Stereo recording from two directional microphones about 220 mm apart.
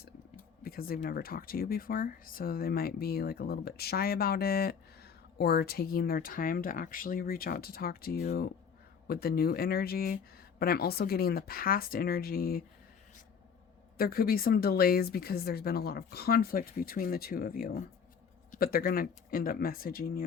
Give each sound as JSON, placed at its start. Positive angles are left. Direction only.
{"t": 0.6, "sound": "speech", "side_deg": 40}
{"t": 14.0, "sound": "speech", "side_deg": 40}